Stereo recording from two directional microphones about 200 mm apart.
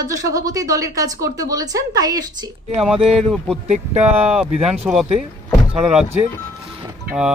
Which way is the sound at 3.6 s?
35° right (ahead or behind).